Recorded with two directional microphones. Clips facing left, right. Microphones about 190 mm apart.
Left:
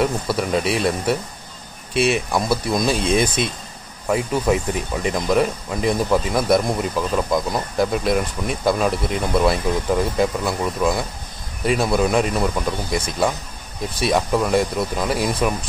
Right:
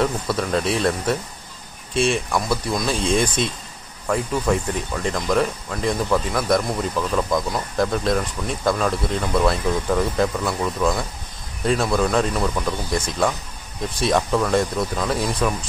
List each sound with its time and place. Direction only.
0.0 s speech: 10° left (ahead or behind)
2.1 s speech: 15° left (ahead or behind)
12.9 s speech: centre (ahead or behind)